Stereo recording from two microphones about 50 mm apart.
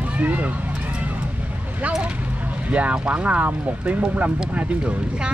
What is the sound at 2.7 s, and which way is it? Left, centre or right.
Speech, right.